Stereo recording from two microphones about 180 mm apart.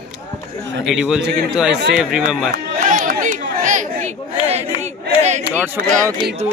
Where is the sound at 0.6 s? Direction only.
90° right.